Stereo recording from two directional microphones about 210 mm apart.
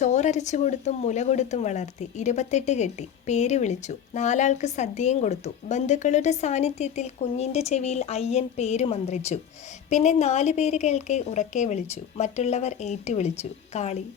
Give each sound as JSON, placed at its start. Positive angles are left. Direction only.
{"t": 0.0, "sound": "speech", "side_deg": 35}